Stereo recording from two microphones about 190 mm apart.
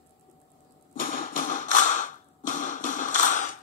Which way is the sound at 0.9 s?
45° left (ahead or behind).